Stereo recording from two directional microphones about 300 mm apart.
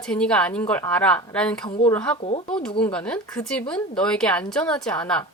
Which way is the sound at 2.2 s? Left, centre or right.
Centre.